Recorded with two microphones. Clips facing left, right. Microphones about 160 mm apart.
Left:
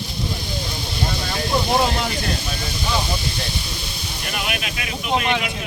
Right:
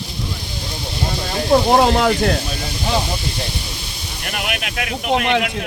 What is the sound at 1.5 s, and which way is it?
Speech, 70° right (ahead or behind).